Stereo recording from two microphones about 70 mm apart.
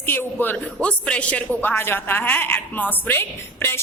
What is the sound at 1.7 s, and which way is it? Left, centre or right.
A woman's voice, left.